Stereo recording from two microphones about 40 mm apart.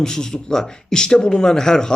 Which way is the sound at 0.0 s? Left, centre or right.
Centre.